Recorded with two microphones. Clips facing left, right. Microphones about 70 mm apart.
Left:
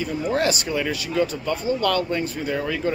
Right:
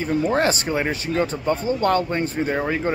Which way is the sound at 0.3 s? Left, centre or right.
Right.